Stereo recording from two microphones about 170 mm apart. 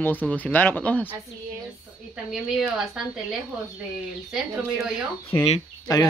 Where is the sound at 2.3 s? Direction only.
Centre (ahead or behind).